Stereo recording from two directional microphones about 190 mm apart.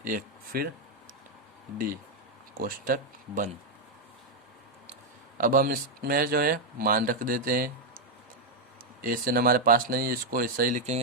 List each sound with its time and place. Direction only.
0.0 s speech: 50° right (ahead or behind)
2.6 s speech: 50° right (ahead or behind)
5.4 s speech: 50° right (ahead or behind)
9.0 s speech: 50° right (ahead or behind)